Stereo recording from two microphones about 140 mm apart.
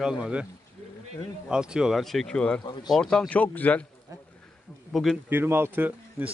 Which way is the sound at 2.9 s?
5° left (ahead or behind).